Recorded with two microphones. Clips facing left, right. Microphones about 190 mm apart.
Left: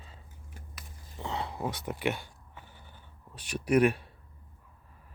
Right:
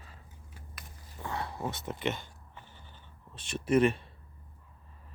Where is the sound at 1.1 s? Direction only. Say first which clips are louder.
Left 2 dB; 20° left (ahead or behind).